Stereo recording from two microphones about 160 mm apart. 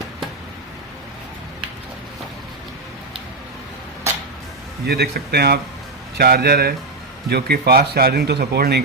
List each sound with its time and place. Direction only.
4.9 s speech: 85° right